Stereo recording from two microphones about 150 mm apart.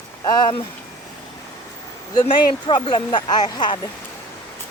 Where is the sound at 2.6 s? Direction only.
30° left (ahead or behind).